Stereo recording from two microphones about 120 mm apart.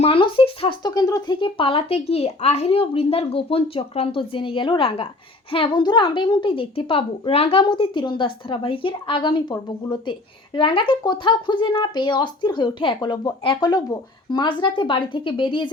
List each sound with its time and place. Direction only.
0.0 s speech: 50° left (ahead or behind)
0.8 s a woman's voice: 35° left (ahead or behind)
1.4 s speech: 45° left (ahead or behind)
7.6 s a woman's voice: 40° left (ahead or behind)